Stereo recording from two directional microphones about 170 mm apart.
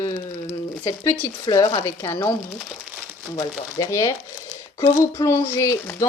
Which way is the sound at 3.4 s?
20° left (ahead or behind).